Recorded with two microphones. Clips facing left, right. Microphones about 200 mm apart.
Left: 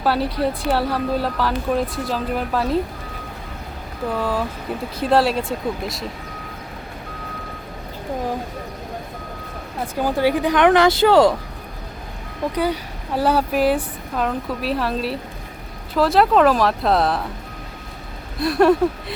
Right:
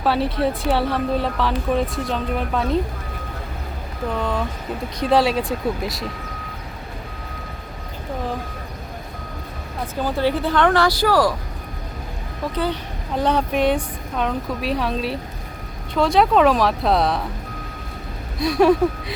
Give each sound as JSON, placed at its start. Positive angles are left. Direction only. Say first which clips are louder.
{"t": 0.0, "sound": "a woman's voice", "louder": "even", "side_deg": 0}
{"t": 4.1, "sound": "a woman's voice", "louder": "left 1 dB", "side_deg": 5}
{"t": 9.8, "sound": "speech", "louder": "left 2 dB", "side_deg": 15}
{"t": 12.5, "sound": "a woman's voice", "louder": "left 2 dB", "side_deg": 10}
{"t": 18.3, "sound": "speech", "louder": "even", "side_deg": 0}